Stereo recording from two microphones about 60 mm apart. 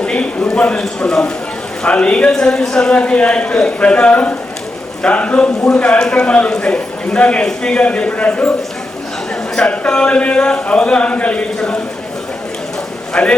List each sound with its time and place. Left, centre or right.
0.0 s a man's voice: centre
9.6 s a man's voice: centre
13.2 s speech: centre